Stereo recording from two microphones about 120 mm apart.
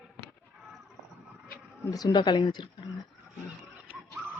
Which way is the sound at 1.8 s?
35° left (ahead or behind).